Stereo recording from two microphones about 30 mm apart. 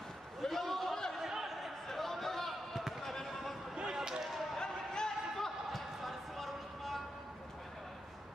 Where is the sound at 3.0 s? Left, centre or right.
Centre.